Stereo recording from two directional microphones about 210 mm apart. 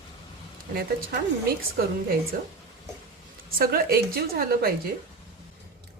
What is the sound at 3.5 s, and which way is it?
A woman's voice, 45° right (ahead or behind).